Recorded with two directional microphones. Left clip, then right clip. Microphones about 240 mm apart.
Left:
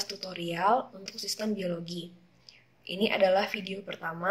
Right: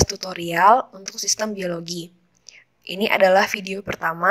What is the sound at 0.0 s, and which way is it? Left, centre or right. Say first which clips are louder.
Speech: right 12 dB; right.